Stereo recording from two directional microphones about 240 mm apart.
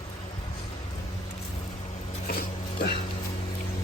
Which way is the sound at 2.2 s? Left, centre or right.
Left.